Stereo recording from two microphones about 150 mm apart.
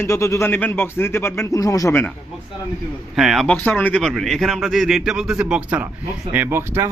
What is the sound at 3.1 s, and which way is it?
A man's voice, centre (ahead or behind).